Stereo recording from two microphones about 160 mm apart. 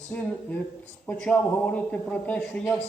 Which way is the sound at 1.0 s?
5° left (ahead or behind).